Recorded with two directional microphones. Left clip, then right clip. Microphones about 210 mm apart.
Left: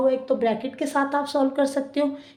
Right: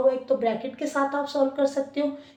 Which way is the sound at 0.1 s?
45° left (ahead or behind).